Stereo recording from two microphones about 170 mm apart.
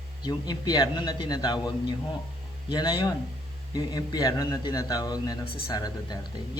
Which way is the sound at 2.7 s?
20° left (ahead or behind).